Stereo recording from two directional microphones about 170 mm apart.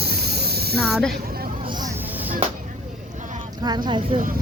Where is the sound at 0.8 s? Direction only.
Centre (ahead or behind).